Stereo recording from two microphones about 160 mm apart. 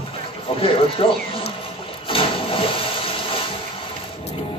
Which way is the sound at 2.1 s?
35° left (ahead or behind).